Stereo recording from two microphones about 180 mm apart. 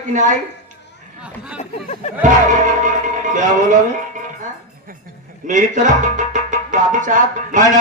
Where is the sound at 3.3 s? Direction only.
45° right (ahead or behind).